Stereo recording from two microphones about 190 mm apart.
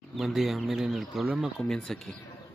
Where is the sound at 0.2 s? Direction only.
Centre (ahead or behind).